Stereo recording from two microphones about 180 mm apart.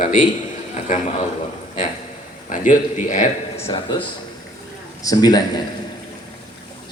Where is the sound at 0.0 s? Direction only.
50° left (ahead or behind).